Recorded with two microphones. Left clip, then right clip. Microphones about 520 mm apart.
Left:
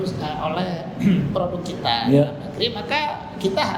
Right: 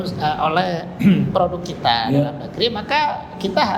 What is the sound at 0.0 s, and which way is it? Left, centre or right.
A man's voice, right.